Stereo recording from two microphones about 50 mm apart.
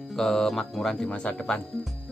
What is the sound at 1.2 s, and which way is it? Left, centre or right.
Speech, centre.